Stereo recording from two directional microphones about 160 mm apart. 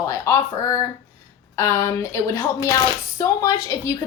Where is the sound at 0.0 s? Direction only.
20° left (ahead or behind).